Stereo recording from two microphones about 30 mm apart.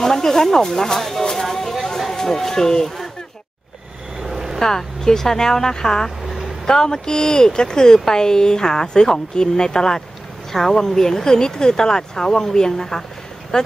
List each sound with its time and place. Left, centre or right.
0.0 s speech: centre
1.3 s a sound: centre
2.0 s speech: centre
4.6 s speech: centre